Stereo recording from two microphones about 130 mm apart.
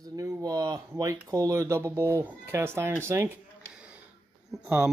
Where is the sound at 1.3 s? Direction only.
25° right (ahead or behind).